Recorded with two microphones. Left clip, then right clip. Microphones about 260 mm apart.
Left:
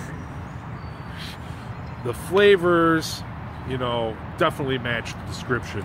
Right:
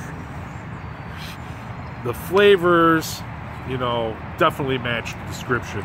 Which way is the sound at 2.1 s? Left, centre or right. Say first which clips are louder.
Right 2 dB; centre.